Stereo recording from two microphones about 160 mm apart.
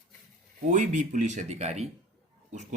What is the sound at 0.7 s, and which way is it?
Speech, 50° right (ahead or behind).